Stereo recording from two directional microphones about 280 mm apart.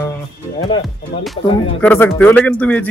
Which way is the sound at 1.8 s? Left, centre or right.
Centre.